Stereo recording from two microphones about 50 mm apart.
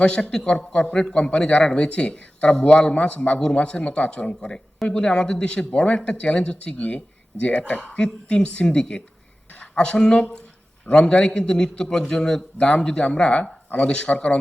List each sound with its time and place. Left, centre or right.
0.0 s a man's voice: centre